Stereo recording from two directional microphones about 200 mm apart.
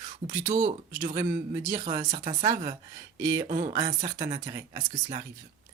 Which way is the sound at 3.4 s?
40° right (ahead or behind).